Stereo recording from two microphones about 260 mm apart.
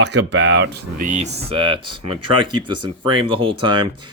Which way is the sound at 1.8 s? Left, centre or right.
Right.